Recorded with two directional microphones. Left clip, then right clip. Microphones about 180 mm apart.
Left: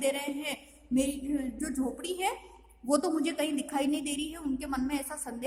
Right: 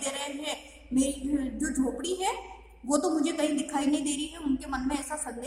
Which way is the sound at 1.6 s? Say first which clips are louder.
Right 4 dB; 45° left (ahead or behind).